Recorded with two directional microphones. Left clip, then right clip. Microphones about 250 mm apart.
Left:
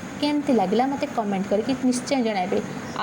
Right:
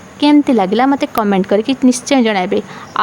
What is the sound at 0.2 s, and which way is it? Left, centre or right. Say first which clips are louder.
A woman's voice: right 11 dB; right.